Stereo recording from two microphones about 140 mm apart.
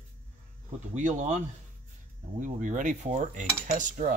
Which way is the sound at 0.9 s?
55° right (ahead or behind).